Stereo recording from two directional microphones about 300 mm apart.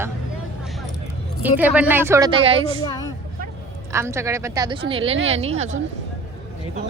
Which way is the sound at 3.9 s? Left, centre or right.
Centre.